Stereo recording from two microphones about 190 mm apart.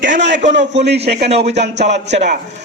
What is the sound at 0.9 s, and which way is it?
Speech, 60° right (ahead or behind).